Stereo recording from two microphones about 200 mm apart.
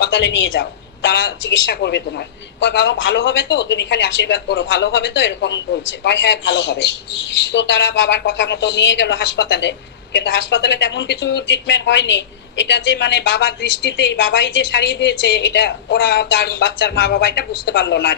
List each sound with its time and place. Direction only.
0.0 s a woman's voice: 60° left (ahead or behind)
7.5 s speech: 60° left (ahead or behind)